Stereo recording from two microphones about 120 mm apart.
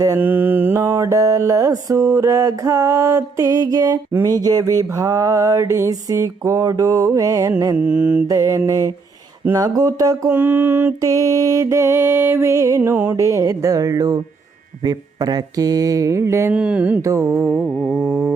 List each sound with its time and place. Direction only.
0.2 s music: 15° right (ahead or behind); by 4.0 s 30° right (ahead or behind)
4.4 s a sound: 30° right (ahead or behind)
4.8 s music: 30° right (ahead or behind)
7.8 s mantra: 10° right (ahead or behind)
8.3 s music: 25° right (ahead or behind)
9.5 s a sound: 30° right (ahead or behind)
10.2 s mantra: 15° right (ahead or behind)
11.0 s music: 30° right (ahead or behind)
16.6 s mantra: 10° right (ahead or behind)
17.0 s music: 25° right (ahead or behind)
17.7 s a sound: 10° left (ahead or behind)